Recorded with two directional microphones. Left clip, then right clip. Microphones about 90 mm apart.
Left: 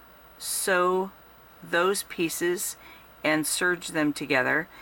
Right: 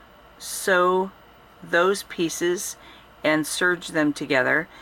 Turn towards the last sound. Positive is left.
turn(degrees=25)  # may be behind; listen again after turning